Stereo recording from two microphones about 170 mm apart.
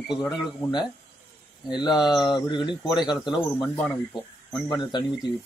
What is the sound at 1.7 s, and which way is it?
Speech, 25° left (ahead or behind).